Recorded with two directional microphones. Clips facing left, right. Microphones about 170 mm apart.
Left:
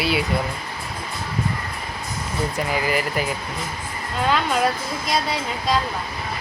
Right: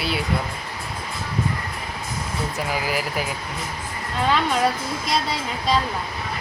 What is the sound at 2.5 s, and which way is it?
Speech, 5° right (ahead or behind).